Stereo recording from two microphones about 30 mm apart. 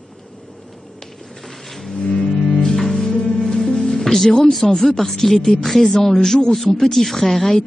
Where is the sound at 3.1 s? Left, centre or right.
Left.